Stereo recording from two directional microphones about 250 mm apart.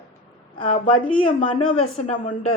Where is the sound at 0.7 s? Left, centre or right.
Left.